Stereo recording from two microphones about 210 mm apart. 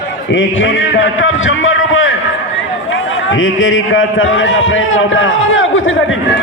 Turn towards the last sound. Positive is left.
turn(degrees=65)  # may be behind; listen again after turning